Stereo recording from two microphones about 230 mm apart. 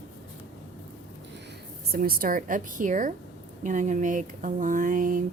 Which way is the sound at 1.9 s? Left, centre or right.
Right.